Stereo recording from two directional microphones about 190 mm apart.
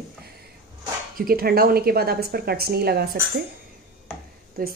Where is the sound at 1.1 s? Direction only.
50° right (ahead or behind).